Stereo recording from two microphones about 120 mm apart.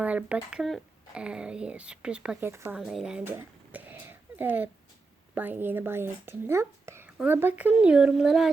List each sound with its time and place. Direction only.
0.0 s speech: 10° right (ahead or behind)
2.4 s speech: 20° right (ahead or behind)
2.7 s speech: 5° right (ahead or behind)
3.2 s a sound: 15° right (ahead or behind)
5.3 s speech: 15° right (ahead or behind)